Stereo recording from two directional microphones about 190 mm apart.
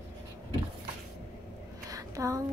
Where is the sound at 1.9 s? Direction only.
15° right (ahead or behind).